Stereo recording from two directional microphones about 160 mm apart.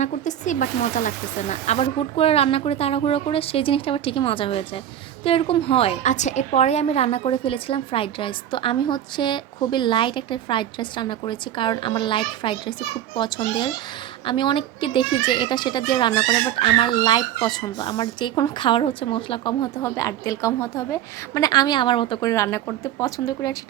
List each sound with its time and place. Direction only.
0.0 s a woman's voice: 50° left (ahead or behind); by 19.7 s 30° left (ahead or behind)
19.7 s a child's voice: 20° left (ahead or behind)
22.3 s a child's voice: 20° left (ahead or behind)